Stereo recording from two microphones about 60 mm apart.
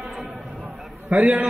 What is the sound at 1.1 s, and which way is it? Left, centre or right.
Speech, right.